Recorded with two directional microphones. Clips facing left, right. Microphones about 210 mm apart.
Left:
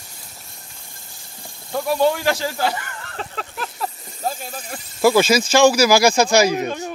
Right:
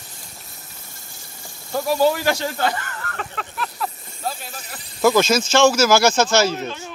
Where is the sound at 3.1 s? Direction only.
35° left (ahead or behind).